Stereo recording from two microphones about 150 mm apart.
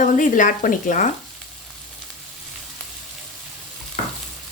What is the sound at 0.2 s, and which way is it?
Speech, 60° left (ahead or behind).